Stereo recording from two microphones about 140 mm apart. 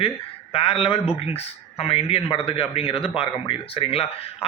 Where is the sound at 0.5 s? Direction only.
40° left (ahead or behind).